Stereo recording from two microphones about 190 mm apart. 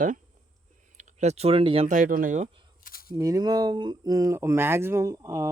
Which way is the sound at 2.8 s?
50° left (ahead or behind).